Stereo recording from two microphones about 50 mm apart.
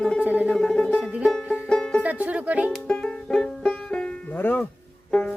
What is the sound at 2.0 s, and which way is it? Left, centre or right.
Music, right.